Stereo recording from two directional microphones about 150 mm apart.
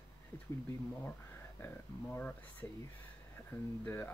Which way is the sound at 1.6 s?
10° left (ahead or behind).